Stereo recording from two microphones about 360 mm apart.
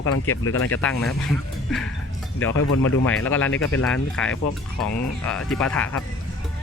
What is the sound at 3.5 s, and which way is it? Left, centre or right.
Speech, left.